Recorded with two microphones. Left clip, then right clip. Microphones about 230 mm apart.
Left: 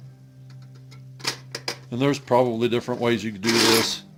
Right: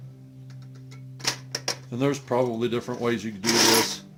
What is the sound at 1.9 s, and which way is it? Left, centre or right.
Speech, left.